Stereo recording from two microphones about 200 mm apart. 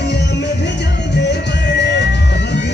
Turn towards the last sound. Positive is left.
turn(degrees=60)  # may be behind; listen again after turning